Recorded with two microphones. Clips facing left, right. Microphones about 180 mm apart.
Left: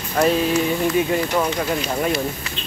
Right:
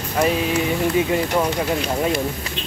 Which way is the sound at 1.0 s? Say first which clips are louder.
Even; 20° right (ahead or behind).